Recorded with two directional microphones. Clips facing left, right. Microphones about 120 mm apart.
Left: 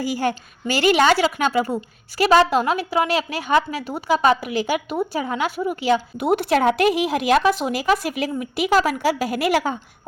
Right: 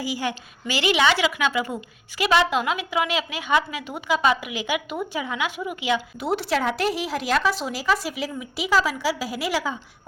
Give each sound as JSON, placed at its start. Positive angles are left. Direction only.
{"t": 0.0, "sound": "a woman's voice", "side_deg": 50}
{"t": 6.1, "sound": "speech", "side_deg": 55}